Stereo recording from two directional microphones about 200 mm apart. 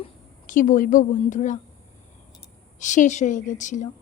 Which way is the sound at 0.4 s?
40° left (ahead or behind).